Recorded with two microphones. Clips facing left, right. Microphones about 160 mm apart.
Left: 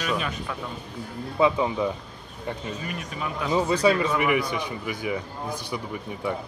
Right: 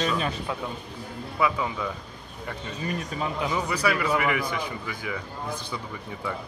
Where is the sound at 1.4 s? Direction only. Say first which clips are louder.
Left 5 dB; 25° left (ahead or behind).